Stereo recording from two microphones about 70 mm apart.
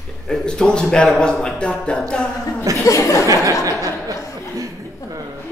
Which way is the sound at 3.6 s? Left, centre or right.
Right.